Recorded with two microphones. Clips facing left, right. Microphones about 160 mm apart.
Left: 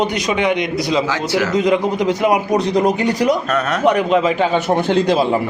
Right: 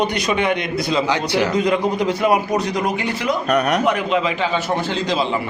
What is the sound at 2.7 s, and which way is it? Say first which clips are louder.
Speech: left 6 dB; 40° left (ahead or behind).